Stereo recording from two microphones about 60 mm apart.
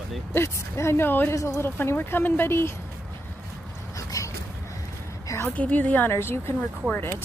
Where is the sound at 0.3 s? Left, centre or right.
Left.